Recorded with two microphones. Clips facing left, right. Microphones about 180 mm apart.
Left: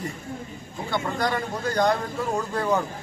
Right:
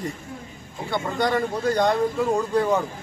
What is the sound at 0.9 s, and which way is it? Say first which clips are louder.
A man's voice: right 3 dB; centre (ahead or behind).